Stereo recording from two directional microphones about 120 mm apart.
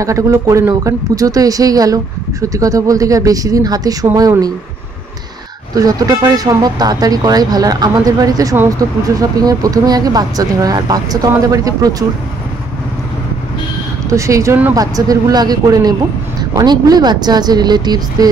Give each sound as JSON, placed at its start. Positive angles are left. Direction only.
{"t": 0.0, "sound": "speech", "side_deg": -25}
{"t": 5.8, "sound": "speech", "side_deg": -30}
{"t": 14.0, "sound": "speech", "side_deg": -25}